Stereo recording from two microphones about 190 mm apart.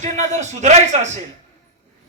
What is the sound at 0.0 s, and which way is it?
Speech, 40° right (ahead or behind).